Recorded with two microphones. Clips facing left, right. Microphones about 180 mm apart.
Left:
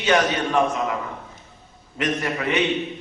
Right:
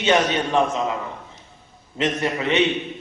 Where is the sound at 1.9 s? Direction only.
25° right (ahead or behind).